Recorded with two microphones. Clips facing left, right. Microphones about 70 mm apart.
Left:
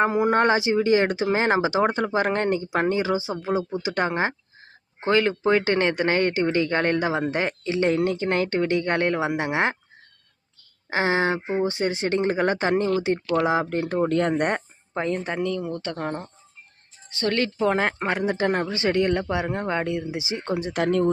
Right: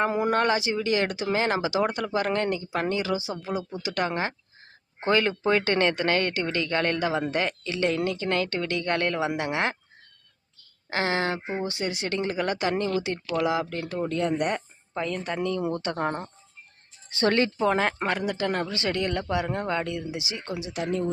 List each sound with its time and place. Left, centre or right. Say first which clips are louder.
0.0 s speech: left 4 dB; centre
4.9 s speech: left 2 dB; centre; by 9.7 s left
10.8 s speech: left 4 dB; left
14.0 s speech: left 3 dB; left
14.9 s speech: left 3 dB; left
15.5 s a woman's voice: right 1 dB; centre
17.7 s speech: left 1 dB; centre
18.2 s speech: left 4 dB; left